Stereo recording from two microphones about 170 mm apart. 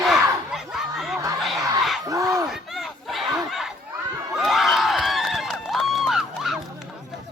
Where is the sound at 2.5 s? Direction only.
Centre (ahead or behind).